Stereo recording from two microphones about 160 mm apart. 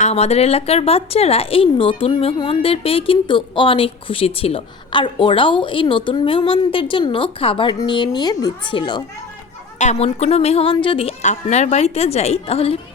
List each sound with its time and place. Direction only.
0.0 s a woman's voice: 40° left (ahead or behind)
9.7 s a woman's voice: 45° left (ahead or behind)